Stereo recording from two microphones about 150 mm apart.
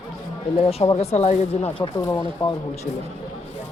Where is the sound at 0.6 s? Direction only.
40° left (ahead or behind).